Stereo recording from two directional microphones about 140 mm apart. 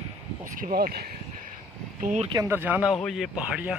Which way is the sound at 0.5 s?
85° right.